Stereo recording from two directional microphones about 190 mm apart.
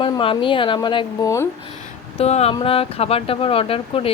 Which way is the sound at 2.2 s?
35° left (ahead or behind).